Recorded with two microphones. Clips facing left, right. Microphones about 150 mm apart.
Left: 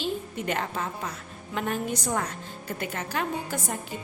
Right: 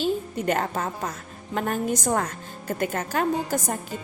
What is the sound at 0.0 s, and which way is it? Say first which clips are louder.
A woman's voice: right 5 dB; 45° right (ahead or behind).